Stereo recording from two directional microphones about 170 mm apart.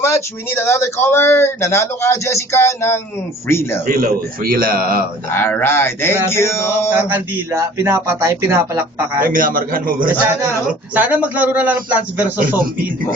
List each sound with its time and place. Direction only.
0.0 s speech: 15° left (ahead or behind)
3.8 s a man's voice: 60° right (ahead or behind)
5.3 s speech: 10° left (ahead or behind)
7.1 s speech: 15° right (ahead or behind)
9.2 s a man's voice: 55° right (ahead or behind)
10.2 s speech: 10° right (ahead or behind)